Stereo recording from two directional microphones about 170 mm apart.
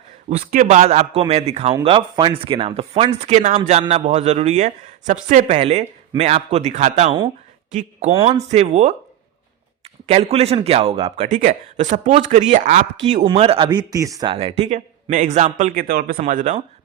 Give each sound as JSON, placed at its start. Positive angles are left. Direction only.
{"t": 0.5, "sound": "a man's voice", "side_deg": -45}
{"t": 8.1, "sound": "a man's voice", "side_deg": -30}
{"t": 10.1, "sound": "a man's voice", "side_deg": -40}
{"t": 11.3, "sound": "speech", "side_deg": -50}
{"t": 14.3, "sound": "speech", "side_deg": -40}